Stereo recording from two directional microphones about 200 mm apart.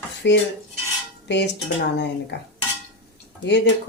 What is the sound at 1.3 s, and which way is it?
Speech, 60° left (ahead or behind).